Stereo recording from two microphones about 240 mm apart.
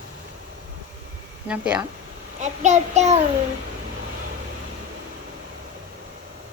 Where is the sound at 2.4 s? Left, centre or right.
Right.